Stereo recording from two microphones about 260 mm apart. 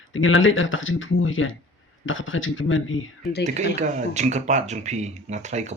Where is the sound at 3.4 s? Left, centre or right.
Right.